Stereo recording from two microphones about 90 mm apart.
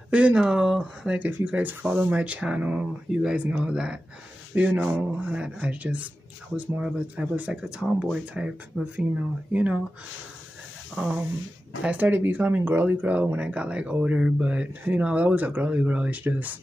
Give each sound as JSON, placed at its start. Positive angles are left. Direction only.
{"t": 0.1, "sound": "speech", "side_deg": -15}
{"t": 11.0, "sound": "speech", "side_deg": -15}